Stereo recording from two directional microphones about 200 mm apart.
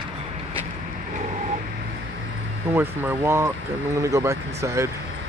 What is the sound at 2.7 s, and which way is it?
Speech, 10° right (ahead or behind).